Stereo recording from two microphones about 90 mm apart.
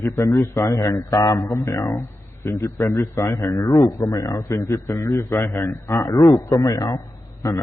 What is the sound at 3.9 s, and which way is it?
A man's voice, 35° left (ahead or behind).